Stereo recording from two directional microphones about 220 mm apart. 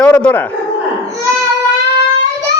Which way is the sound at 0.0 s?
5° left (ahead or behind).